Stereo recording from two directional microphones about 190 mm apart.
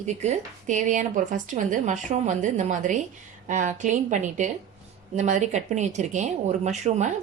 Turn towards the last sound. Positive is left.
turn(degrees=-40)  # may be behind; listen again after turning